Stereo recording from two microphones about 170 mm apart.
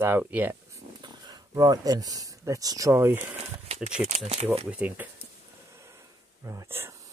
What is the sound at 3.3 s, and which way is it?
Speech, 40° right (ahead or behind).